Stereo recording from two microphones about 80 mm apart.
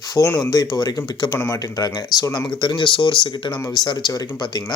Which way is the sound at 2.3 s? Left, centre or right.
Left.